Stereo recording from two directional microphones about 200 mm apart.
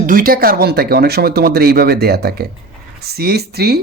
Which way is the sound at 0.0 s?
45° right (ahead or behind).